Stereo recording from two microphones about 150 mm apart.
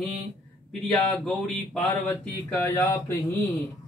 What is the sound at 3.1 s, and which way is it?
Speech, 20° left (ahead or behind).